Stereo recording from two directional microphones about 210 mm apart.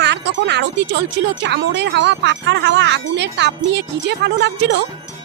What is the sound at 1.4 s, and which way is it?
Speech, 55° right (ahead or behind).